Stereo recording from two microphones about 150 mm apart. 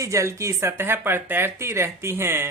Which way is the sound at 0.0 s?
20° right (ahead or behind).